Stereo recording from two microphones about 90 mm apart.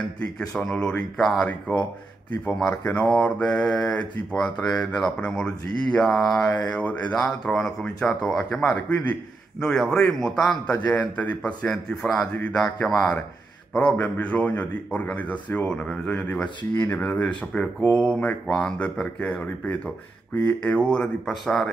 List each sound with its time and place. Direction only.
0.2 s speech: 5° left (ahead or behind)
1.4 s speech: 15° left (ahead or behind)
8.7 s speech: 15° left (ahead or behind)
9.6 s speech: 5° left (ahead or behind)
20.6 s speech: 10° left (ahead or behind)